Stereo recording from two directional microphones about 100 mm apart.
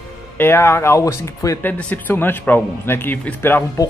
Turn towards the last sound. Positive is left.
turn(degrees=20)  # may be behind; listen again after turning